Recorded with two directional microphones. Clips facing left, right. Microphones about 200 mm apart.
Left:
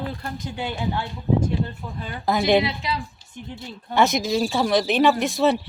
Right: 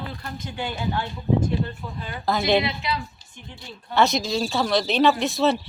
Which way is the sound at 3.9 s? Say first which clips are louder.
Left 1 dB; 15° left (ahead or behind).